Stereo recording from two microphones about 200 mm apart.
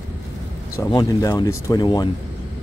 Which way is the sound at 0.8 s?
15° left (ahead or behind).